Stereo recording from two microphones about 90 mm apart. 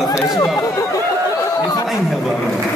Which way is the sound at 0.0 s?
30° left (ahead or behind).